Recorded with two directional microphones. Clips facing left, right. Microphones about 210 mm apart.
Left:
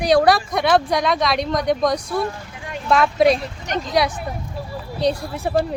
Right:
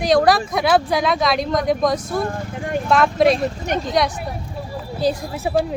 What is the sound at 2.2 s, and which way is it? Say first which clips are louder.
Vehicle: right 3 dB; 50° right (ahead or behind).